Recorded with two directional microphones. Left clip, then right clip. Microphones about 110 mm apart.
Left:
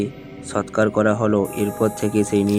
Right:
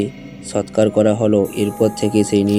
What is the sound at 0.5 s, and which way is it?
A man's voice, 20° right (ahead or behind).